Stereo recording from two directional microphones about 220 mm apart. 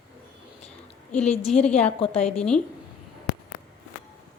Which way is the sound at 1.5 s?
5° left (ahead or behind).